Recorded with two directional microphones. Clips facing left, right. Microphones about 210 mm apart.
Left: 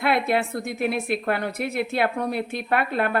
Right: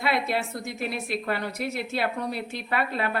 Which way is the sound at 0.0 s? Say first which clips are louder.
Left 4 dB; 55° left (ahead or behind).